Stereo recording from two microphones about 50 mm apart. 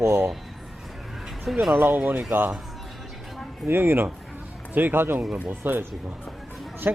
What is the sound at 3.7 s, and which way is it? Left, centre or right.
Speech, right.